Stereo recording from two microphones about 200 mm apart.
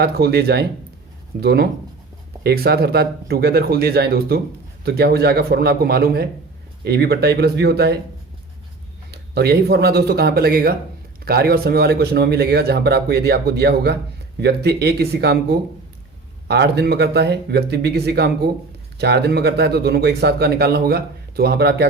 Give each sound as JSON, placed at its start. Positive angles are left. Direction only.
{"t": 0.0, "sound": "speech", "side_deg": -55}
{"t": 9.1, "sound": "speech", "side_deg": -55}